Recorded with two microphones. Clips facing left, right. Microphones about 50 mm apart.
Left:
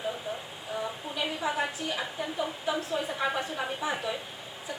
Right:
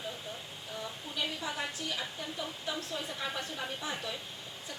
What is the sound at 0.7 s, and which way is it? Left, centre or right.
A woman's voice, centre.